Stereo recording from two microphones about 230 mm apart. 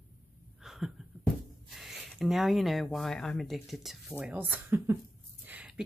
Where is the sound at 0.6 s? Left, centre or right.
Centre.